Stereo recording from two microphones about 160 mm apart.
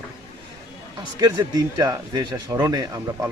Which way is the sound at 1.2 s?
25° right (ahead or behind).